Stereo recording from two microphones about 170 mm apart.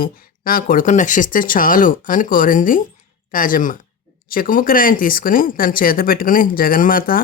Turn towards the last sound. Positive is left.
turn(degrees=55)  # may be behind; listen again after turning